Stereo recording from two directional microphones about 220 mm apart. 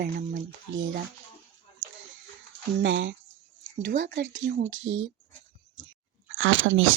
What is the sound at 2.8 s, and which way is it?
Speech, 60° right (ahead or behind).